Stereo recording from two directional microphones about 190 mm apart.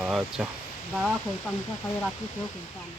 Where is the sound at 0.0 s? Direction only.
Centre (ahead or behind).